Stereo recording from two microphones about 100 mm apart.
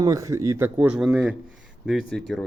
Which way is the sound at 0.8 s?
15° right (ahead or behind).